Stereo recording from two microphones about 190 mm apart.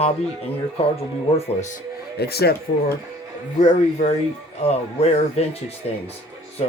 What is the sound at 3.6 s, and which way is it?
Speech, 40° left (ahead or behind).